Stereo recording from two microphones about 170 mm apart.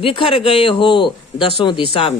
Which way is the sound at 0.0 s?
30° left (ahead or behind).